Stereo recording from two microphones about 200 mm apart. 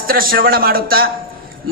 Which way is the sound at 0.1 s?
45° right (ahead or behind).